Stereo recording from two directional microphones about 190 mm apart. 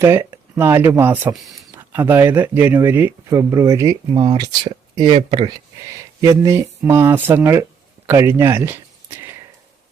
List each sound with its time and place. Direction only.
0.0 s speech: 15° right (ahead or behind)
5.9 s speech: 15° right (ahead or behind)
8.0 s a sound: 15° right (ahead or behind)